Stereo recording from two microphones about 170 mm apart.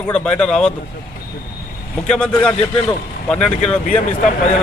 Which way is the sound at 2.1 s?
5° left (ahead or behind).